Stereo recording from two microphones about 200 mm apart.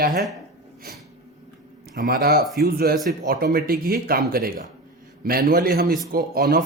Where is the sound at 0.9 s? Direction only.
50° right (ahead or behind).